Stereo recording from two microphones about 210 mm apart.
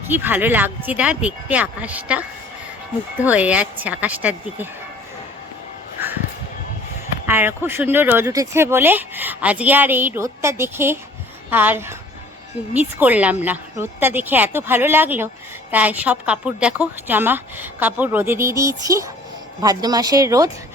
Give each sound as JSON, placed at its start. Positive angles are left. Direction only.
{"t": 0.1, "sound": "speech", "side_deg": -10}
{"t": 6.0, "sound": "crow", "side_deg": -10}
{"t": 7.3, "sound": "speech", "side_deg": -10}